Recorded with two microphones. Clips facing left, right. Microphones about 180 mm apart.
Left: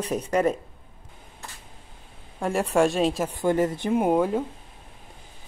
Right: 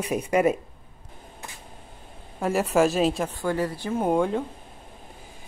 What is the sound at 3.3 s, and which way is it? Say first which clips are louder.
Speech: left 4 dB; 20° left (ahead or behind).